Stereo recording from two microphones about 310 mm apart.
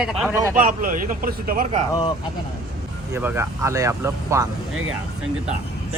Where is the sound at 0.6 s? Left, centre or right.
Right.